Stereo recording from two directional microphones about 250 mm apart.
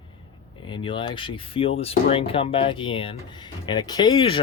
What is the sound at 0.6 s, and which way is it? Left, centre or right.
Speech, centre.